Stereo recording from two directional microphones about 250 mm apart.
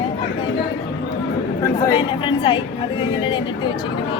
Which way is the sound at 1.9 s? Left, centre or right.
Centre.